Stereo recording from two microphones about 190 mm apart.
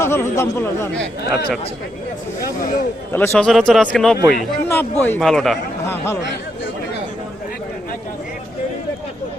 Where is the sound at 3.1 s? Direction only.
10° left (ahead or behind).